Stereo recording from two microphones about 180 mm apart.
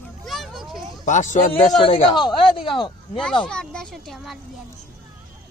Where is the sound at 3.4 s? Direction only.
5° left (ahead or behind).